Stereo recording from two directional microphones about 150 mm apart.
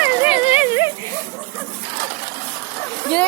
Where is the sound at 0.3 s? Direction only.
40° left (ahead or behind).